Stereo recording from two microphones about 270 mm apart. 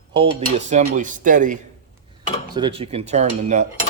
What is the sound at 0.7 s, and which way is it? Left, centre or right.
Cutlery, right.